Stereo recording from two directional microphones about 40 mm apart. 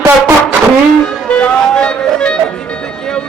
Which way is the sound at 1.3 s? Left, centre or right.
Left.